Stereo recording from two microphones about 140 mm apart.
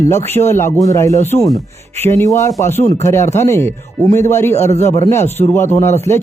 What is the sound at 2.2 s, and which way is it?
Speech, 20° left (ahead or behind).